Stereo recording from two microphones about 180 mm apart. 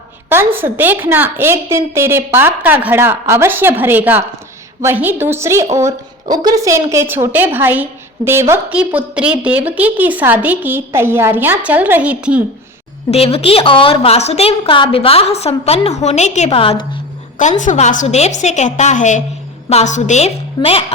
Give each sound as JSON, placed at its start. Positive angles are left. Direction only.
{"t": 0.3, "sound": "a woman's voice", "side_deg": -10}
{"t": 13.1, "sound": "a woman's voice", "side_deg": 35}
{"t": 17.6, "sound": "a woman's voice", "side_deg": 45}